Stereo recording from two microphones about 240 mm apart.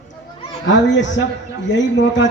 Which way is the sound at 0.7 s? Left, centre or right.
Left.